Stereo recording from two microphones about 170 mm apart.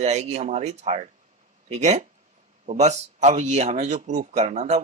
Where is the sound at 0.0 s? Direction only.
40° right (ahead or behind).